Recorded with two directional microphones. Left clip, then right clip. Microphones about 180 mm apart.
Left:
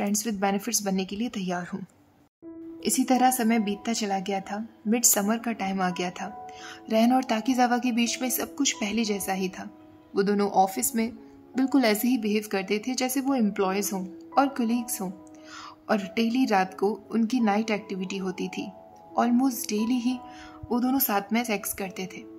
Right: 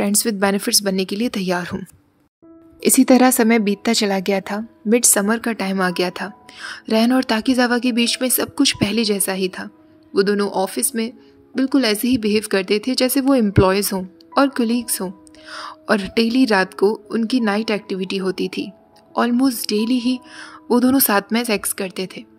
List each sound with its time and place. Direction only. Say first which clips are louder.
0.0 s speech: right 8 dB; 20° right (ahead or behind)
2.8 s speech: right 9 dB; 25° right (ahead or behind)